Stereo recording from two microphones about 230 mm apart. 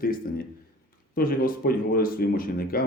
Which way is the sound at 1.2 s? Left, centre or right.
Left.